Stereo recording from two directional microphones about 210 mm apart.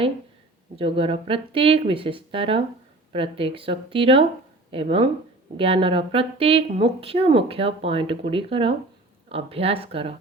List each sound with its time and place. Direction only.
0.8 s speech: 25° right (ahead or behind)